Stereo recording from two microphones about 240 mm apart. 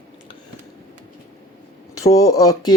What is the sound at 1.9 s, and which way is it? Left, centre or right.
Speech, centre.